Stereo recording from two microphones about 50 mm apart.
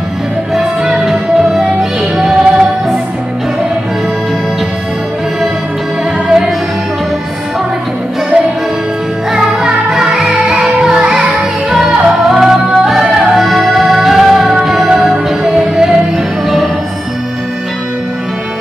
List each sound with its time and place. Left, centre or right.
0.6 s music: centre
9.3 s music: centre